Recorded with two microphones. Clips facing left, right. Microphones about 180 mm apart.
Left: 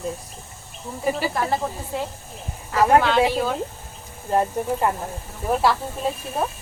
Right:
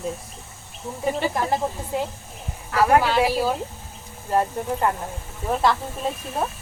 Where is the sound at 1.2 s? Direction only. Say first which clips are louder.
Right 1 dB; 5° left (ahead or behind).